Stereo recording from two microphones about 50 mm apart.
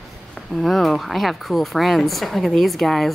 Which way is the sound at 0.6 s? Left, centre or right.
Centre.